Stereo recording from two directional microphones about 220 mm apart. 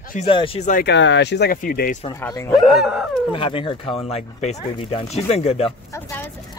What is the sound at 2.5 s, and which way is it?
Speech, centre (ahead or behind).